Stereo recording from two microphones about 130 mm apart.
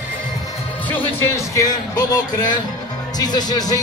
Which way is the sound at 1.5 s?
30° left (ahead or behind).